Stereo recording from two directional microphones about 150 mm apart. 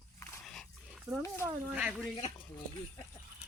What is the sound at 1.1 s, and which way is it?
Speech, centre (ahead or behind).